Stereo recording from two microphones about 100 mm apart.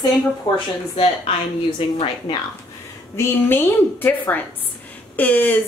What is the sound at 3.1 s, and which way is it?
A woman's voice, 20° left (ahead or behind).